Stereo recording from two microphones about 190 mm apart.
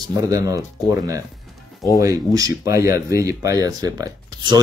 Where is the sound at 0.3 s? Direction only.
15° right (ahead or behind).